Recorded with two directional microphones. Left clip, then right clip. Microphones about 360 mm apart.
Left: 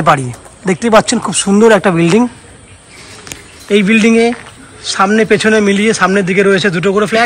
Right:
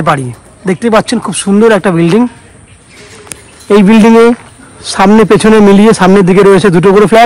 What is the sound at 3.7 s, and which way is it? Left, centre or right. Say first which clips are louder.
A man's voice: right 5 dB; centre.